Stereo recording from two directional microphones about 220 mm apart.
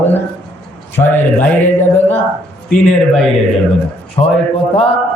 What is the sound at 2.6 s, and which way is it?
Speech, 5° left (ahead or behind).